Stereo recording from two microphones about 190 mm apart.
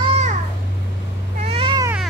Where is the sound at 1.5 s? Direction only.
30° right (ahead or behind).